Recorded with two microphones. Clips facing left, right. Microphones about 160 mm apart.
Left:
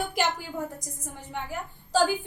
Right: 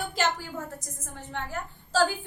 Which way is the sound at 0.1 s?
15° left (ahead or behind).